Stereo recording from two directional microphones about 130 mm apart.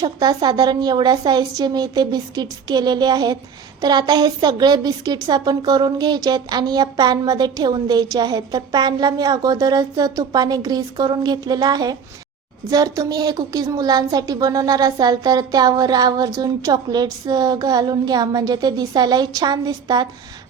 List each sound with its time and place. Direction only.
0.0 s a woman's voice: 30° right (ahead or behind)